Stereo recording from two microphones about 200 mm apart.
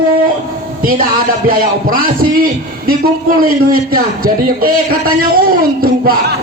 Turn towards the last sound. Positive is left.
turn(degrees=-50)  # may be behind; listen again after turning